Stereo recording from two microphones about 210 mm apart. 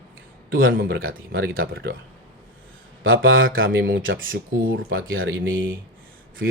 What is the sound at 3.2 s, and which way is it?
Speech, 70° right (ahead or behind).